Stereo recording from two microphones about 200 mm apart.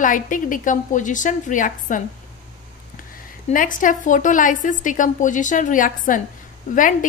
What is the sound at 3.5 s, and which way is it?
A woman's voice, 40° left (ahead or behind).